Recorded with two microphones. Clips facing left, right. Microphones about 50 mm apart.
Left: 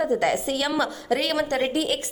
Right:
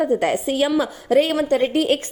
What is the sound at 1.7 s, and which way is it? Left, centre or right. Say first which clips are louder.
Speech: right 6 dB; right.